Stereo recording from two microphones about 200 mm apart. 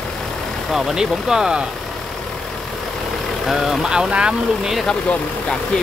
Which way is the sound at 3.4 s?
Centre (ahead or behind).